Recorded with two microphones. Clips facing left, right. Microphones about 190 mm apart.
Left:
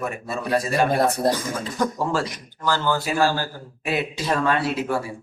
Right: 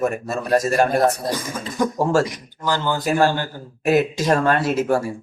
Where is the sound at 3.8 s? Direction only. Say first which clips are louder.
Right 7 dB; 45° right (ahead or behind).